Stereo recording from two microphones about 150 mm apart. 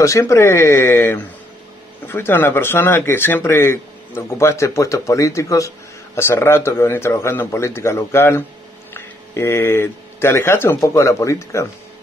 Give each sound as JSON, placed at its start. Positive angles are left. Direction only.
{"t": 0.0, "sound": "speech", "side_deg": 20}